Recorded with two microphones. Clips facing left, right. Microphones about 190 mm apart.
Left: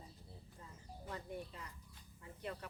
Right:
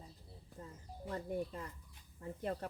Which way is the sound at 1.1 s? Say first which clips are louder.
Right 8 dB; 45° right (ahead or behind).